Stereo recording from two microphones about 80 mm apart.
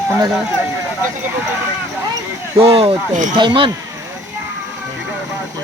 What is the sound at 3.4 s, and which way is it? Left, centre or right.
Speech, right.